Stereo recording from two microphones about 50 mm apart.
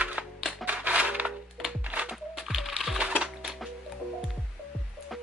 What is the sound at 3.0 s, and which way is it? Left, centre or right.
Music, right.